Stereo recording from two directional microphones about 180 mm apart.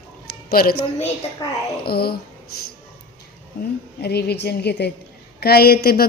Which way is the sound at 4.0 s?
65° left (ahead or behind).